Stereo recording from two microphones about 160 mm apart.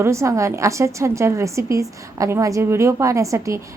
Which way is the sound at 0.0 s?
20° right (ahead or behind).